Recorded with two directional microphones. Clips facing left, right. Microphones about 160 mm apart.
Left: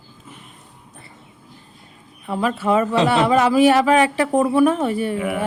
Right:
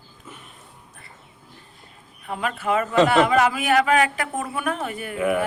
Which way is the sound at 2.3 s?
30° left (ahead or behind).